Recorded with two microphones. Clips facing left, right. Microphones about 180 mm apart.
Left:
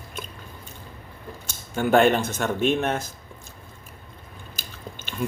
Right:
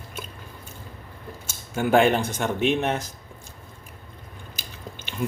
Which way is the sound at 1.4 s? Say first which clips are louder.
Even; 10° right (ahead or behind).